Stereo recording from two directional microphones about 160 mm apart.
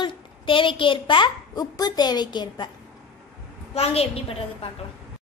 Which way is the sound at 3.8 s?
40° left (ahead or behind).